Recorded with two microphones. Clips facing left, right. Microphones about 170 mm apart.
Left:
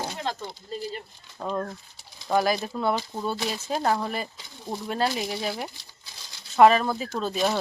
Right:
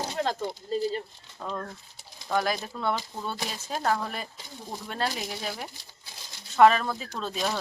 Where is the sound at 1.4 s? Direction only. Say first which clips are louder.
Left 5 dB; 15° left (ahead or behind).